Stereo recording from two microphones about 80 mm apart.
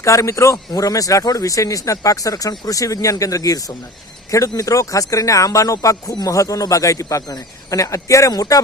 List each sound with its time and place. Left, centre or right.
0.0 s speech: left